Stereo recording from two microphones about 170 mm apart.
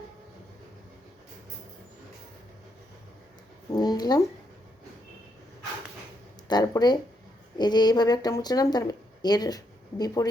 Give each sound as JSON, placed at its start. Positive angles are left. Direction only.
{"t": 3.7, "sound": "speech", "side_deg": 25}
{"t": 6.5, "sound": "a woman's voice", "side_deg": 25}